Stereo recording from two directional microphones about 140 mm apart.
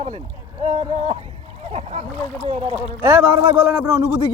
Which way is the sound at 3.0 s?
15° right (ahead or behind).